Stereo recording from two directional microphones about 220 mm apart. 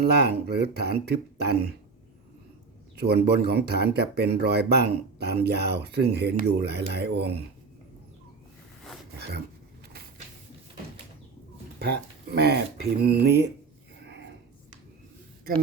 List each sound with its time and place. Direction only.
0.0 s speech: 45° right (ahead or behind)
2.9 s speech: 45° right (ahead or behind)
9.1 s a sound: 45° right (ahead or behind)
11.8 s speech: 45° right (ahead or behind)